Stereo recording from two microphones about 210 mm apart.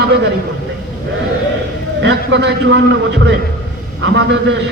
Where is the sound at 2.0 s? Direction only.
55° right (ahead or behind).